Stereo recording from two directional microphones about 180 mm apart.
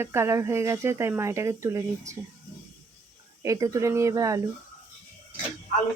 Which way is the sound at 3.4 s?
15° right (ahead or behind).